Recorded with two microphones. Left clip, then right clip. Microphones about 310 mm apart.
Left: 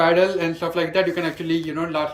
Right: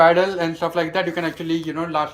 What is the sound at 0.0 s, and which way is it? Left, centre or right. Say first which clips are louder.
A man's voice: right 2 dB; centre.